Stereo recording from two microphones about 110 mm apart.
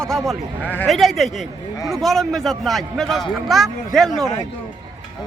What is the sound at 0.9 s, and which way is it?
A man's voice, centre (ahead or behind).